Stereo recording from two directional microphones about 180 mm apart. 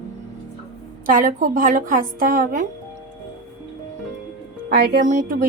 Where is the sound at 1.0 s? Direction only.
50° right (ahead or behind).